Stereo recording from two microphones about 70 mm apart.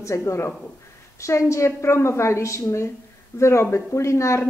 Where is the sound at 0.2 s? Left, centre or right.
Left.